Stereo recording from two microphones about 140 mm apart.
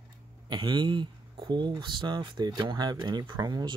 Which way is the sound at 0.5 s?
30° right (ahead or behind).